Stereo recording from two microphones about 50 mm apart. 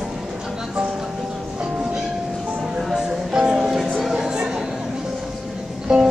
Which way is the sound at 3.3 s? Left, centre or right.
Centre.